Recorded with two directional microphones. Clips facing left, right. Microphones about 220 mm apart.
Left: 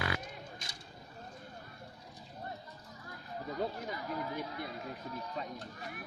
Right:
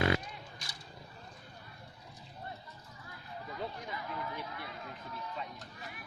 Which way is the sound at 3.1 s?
40° left (ahead or behind).